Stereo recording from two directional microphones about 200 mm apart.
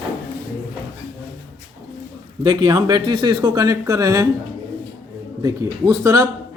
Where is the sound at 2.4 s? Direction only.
20° right (ahead or behind).